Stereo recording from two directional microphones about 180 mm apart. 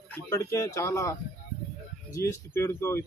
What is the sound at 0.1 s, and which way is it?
A man's voice, 15° left (ahead or behind).